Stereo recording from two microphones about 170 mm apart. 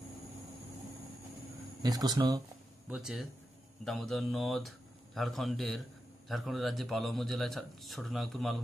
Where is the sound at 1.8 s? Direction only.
25° right (ahead or behind).